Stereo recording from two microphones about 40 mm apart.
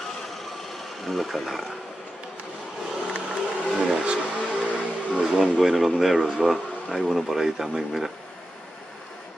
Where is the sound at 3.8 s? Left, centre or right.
Right.